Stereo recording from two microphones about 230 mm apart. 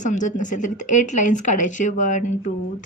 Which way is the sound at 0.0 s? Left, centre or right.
Left.